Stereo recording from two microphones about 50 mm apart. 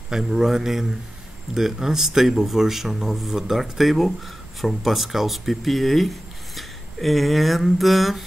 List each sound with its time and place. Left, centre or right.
0.1 s a man's voice: centre